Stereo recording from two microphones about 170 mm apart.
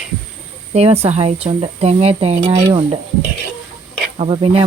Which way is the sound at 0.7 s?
35° right (ahead or behind).